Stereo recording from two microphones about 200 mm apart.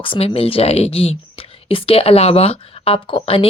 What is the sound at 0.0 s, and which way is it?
Speech, 25° left (ahead or behind).